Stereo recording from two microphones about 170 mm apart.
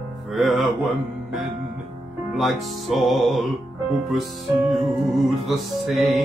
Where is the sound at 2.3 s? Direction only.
Centre (ahead or behind).